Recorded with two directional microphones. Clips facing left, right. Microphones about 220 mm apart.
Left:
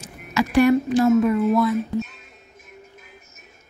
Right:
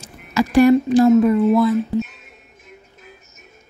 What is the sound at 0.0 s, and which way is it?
Speech, 35° right (ahead or behind).